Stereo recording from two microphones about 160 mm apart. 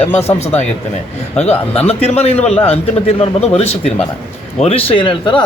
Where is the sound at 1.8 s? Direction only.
40° left (ahead or behind).